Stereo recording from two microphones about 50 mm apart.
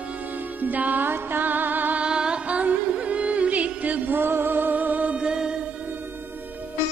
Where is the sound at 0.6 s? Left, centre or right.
Right.